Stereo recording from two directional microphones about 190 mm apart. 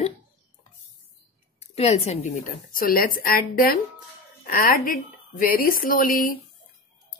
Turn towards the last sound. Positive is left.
turn(degrees=50)  # may be behind; listen again after turning